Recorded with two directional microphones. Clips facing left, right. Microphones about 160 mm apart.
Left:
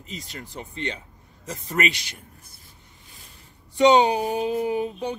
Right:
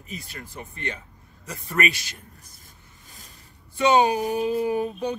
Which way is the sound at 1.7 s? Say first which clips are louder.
Even; 20° left (ahead or behind).